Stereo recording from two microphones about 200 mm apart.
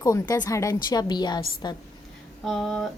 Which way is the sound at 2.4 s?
Centre (ahead or behind).